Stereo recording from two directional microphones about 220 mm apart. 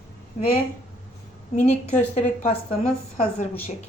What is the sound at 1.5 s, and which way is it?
A woman's voice, 30° left (ahead or behind).